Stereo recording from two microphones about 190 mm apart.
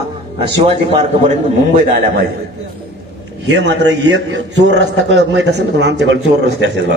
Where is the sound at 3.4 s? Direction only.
65° right (ahead or behind).